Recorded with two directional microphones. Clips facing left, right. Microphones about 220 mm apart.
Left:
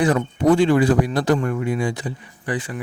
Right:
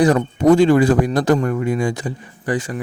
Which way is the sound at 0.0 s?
40° right (ahead or behind).